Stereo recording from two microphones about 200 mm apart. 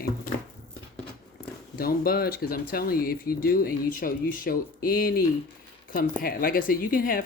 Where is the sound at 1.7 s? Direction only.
50° left (ahead or behind).